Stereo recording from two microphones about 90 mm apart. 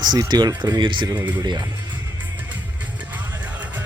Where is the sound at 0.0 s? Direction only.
50° right (ahead or behind).